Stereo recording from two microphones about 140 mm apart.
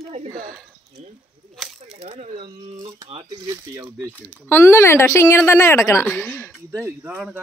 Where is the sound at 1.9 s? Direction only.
50° right (ahead or behind).